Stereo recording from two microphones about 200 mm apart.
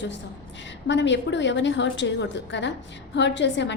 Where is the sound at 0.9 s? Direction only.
65° left (ahead or behind).